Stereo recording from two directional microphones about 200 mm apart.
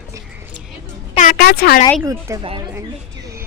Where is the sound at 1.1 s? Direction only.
45° left (ahead or behind).